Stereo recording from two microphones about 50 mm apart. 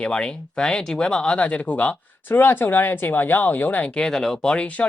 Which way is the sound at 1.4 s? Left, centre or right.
Left.